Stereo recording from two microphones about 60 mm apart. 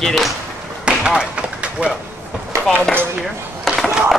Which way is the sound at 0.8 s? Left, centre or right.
Centre.